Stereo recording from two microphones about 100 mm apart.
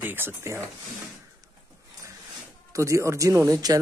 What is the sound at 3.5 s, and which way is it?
Speech, 40° right (ahead or behind).